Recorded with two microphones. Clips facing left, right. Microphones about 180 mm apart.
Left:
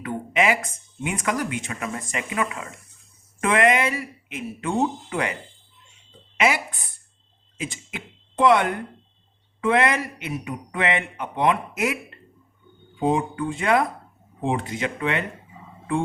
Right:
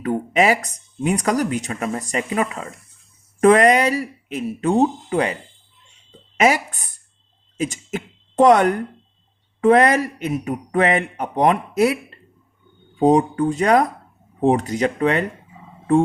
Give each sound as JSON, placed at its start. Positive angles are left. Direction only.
{"t": 0.0, "sound": "speech", "side_deg": -40}